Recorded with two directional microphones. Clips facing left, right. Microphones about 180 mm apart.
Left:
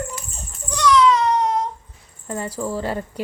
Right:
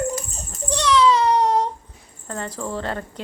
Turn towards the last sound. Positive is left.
turn(degrees=10)  # may be behind; listen again after turning